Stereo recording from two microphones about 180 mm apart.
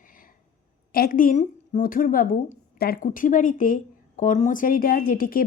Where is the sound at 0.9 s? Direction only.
55° left (ahead or behind).